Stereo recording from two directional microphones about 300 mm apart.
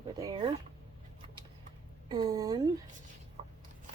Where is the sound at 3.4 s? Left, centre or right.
Right.